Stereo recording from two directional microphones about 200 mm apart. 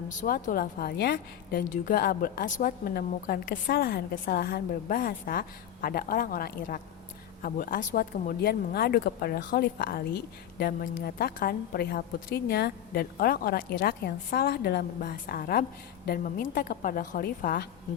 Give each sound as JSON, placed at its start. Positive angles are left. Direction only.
{"t": 0.2, "sound": "a woman's voice", "side_deg": 45}